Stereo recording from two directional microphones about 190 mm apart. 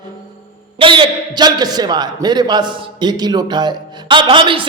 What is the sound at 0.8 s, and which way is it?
A man's voice, 25° right (ahead or behind).